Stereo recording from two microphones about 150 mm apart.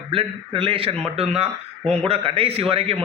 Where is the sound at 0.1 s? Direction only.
35° right (ahead or behind).